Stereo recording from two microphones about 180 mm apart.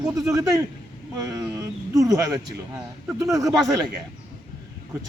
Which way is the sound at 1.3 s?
20° right (ahead or behind).